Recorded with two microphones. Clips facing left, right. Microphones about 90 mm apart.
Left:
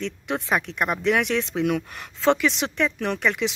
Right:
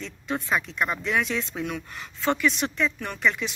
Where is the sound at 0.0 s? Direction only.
70° left (ahead or behind).